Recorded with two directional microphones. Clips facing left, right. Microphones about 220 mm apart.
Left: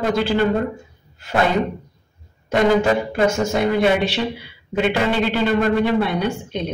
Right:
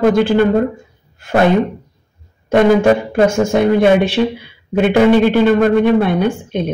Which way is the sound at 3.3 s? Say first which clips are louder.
Right 6 dB; 50° right (ahead or behind).